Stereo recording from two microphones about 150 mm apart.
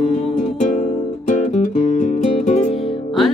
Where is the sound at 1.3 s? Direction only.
55° left (ahead or behind).